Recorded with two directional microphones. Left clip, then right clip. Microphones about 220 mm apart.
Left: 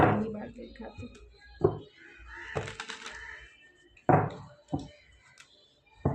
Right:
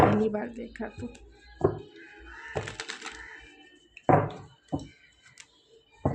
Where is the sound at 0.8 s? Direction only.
45° right (ahead or behind).